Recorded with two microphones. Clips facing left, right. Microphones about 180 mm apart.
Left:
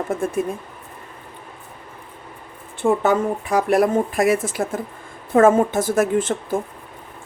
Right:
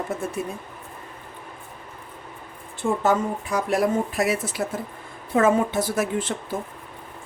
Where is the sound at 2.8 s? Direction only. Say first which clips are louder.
Left 4 dB; 65° left (ahead or behind).